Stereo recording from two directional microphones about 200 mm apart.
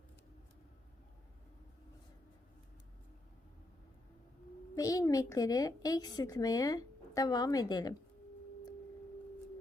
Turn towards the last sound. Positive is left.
turn(degrees=20)  # may be behind; listen again after turning